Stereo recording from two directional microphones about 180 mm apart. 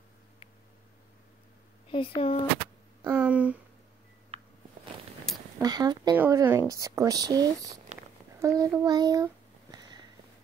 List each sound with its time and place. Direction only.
1.9 s speech: 30° left (ahead or behind)
3.0 s speech: 10° right (ahead or behind)
5.3 s a sound: centre (ahead or behind)
5.6 s speech: 20° right (ahead or behind)
6.1 s speech: 10° right (ahead or behind)
8.8 s a sound: 20° right (ahead or behind)